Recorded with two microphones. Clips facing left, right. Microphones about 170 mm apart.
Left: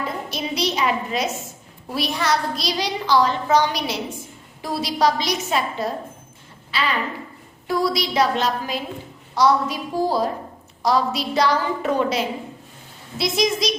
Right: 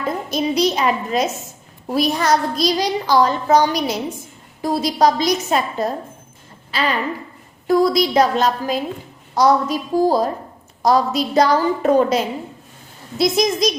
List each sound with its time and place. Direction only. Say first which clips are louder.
0.3 s a woman's voice: right 9 dB; 45° right (ahead or behind)